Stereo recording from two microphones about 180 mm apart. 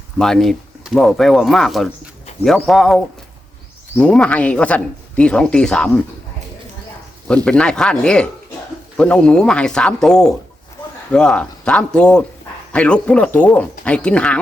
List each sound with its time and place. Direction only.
0.2 s speech: centre (ahead or behind)
7.3 s speech: 5° left (ahead or behind)